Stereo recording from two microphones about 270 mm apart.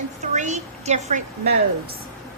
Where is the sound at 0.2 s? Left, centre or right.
Right.